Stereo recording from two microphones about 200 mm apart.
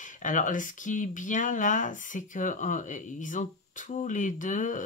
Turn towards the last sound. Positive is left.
turn(degrees=40)  # may be behind; listen again after turning